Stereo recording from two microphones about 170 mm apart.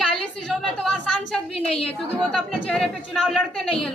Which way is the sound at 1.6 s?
35° left (ahead or behind).